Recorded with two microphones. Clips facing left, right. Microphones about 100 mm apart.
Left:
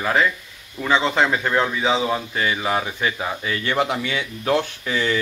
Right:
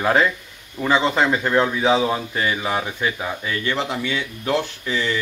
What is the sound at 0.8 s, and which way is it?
Speech, 5° right (ahead or behind).